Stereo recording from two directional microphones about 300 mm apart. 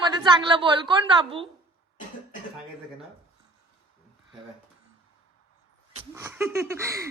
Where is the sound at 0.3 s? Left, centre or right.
Centre.